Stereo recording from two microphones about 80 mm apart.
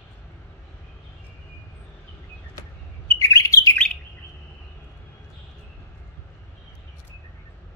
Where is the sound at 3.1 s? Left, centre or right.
Left.